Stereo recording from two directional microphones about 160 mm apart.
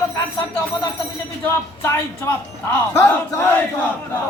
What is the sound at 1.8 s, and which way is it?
Speech, 15° left (ahead or behind).